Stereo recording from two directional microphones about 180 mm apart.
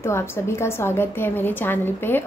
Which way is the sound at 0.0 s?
15° left (ahead or behind).